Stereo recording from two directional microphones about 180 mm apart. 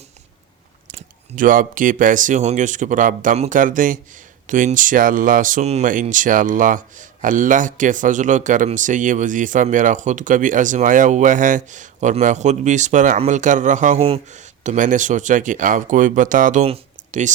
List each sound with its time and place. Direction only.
0.9 s speech: 50° right (ahead or behind)